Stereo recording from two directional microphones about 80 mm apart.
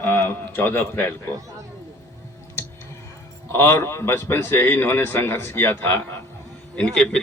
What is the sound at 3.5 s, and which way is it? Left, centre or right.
A man's voice, left.